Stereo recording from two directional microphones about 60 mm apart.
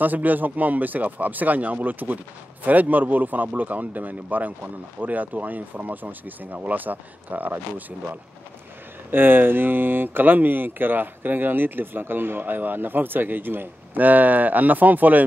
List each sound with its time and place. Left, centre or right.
0.0 s speech: right
9.1 s speech: right